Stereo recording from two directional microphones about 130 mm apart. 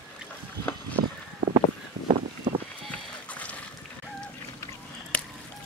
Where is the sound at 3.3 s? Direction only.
10° left (ahead or behind).